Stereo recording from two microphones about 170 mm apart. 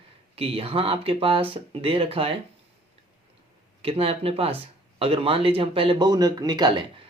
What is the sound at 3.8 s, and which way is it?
Speech, 35° right (ahead or behind).